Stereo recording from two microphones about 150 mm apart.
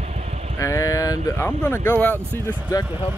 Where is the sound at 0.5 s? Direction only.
20° left (ahead or behind).